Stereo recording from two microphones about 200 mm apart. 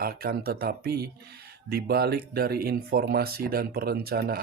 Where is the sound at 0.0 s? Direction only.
50° right (ahead or behind).